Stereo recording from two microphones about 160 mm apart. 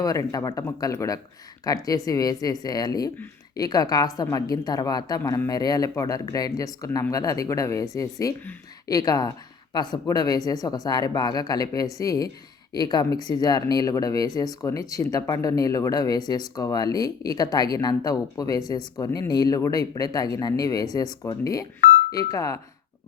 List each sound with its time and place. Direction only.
0.0 s speech: 20° left (ahead or behind)